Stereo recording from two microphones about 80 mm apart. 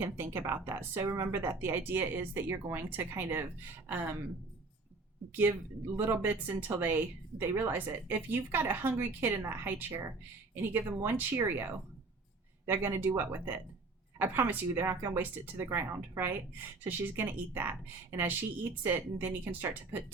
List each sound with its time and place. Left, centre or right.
0.0 s speech: right
5.4 s speech: right